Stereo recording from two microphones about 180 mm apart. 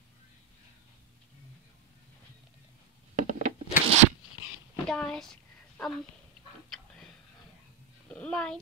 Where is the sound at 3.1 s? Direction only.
45° right (ahead or behind).